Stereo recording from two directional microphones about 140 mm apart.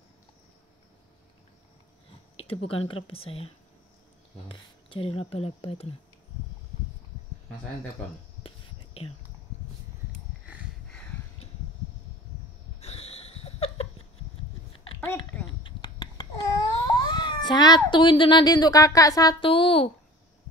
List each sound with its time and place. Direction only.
2.3 s speech: 45° left (ahead or behind)
8.4 s a sound: 45° left (ahead or behind)
12.8 s laughter: 45° left (ahead or behind)
15.0 s a sound: 15° left (ahead or behind)
15.6 s babbling: 35° left (ahead or behind)
19.4 s a child's voice: 40° left (ahead or behind)